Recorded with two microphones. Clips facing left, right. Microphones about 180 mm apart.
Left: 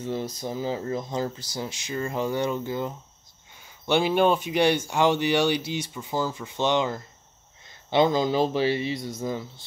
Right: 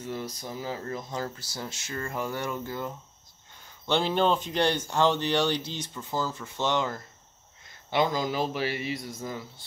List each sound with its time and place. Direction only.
0.0 s speech: 25° left (ahead or behind)